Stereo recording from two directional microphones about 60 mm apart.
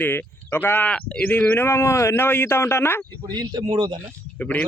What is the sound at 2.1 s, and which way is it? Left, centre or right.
Speech, left.